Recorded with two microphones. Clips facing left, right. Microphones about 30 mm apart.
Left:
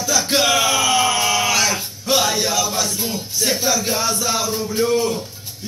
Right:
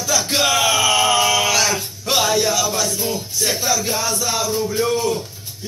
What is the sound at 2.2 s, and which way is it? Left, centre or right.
Speech, left.